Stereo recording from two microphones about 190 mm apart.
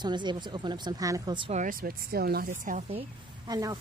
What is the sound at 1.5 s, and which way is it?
Speech, 45° right (ahead or behind).